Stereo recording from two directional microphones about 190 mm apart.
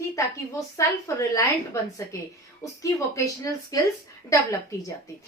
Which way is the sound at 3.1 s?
15° left (ahead or behind).